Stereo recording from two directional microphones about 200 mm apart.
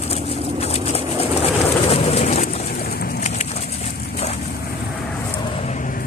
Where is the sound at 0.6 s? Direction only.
30° left (ahead or behind).